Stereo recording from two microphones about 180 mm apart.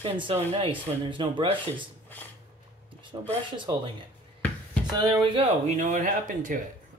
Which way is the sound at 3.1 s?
25° right (ahead or behind).